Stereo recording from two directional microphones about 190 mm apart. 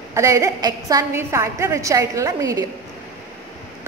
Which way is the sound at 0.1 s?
15° right (ahead or behind).